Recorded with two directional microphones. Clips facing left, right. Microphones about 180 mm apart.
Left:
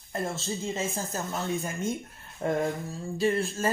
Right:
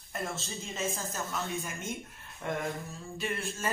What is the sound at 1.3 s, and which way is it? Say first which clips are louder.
Speech: left 5 dB; 30° left (ahead or behind).